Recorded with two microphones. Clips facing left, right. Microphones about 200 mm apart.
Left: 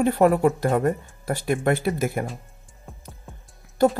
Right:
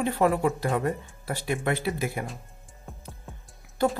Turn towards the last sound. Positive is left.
turn(degrees=45)  # may be behind; listen again after turning